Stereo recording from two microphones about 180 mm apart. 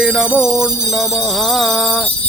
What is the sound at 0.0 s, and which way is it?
Music, 5° right (ahead or behind).